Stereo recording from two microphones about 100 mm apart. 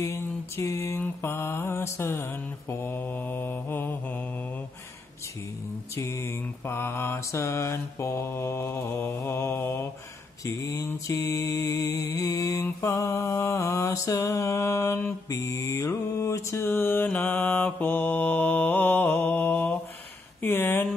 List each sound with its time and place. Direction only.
0.0 s mantra: 25° left (ahead or behind)
5.9 s mantra: 30° left (ahead or behind)
20.4 s speech: 20° left (ahead or behind)